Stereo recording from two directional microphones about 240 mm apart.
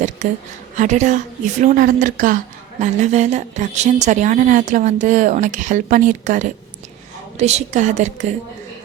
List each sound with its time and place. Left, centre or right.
0.2 s a woman's voice: right